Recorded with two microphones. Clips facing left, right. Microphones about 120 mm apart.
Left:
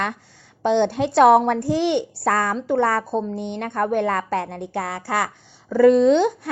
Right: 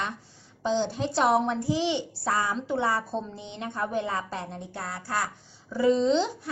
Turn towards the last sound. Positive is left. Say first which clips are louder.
# left 9 dB
turn(degrees=60)  # may be behind; listen again after turning